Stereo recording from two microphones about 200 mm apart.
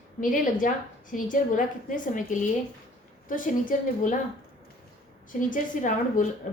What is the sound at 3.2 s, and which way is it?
Speech, 40° left (ahead or behind).